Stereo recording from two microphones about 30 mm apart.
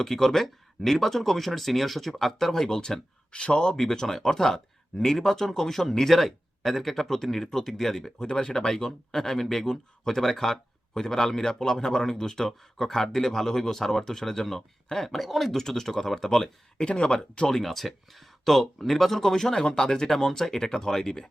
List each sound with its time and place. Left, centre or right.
0.1 s speech: centre; by 3.8 s left
3.8 s speech: centre
16.7 s speech: left
17.5 s speech: centre
19.1 s speech: centre